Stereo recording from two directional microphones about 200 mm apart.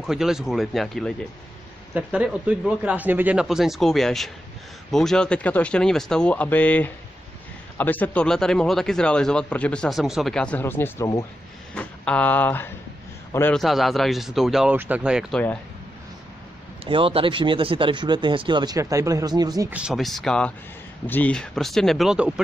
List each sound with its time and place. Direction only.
0.0 s speech: centre (ahead or behind)
16.8 s speech: 25° right (ahead or behind)
19.7 s speech: 5° right (ahead or behind)